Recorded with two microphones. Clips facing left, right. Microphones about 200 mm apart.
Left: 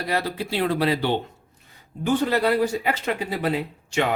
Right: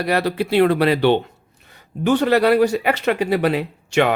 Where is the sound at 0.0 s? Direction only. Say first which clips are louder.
Right 6 dB; 70° right (ahead or behind).